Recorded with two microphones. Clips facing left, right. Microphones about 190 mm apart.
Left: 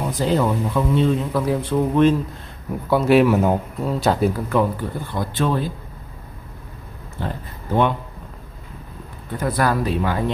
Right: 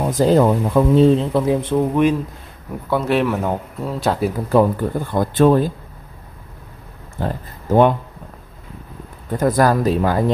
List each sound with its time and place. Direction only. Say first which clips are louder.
0.1 s speech: right 6 dB; 45° right (ahead or behind); by 2.1 s 15° right (ahead or behind)
2.9 s speech: left 3 dB; 5° left (ahead or behind)
4.5 s speech: right 5 dB; 45° right (ahead or behind)
7.2 s speech: right 4 dB; 45° right (ahead or behind)
9.4 s speech: right 5 dB; 45° right (ahead or behind)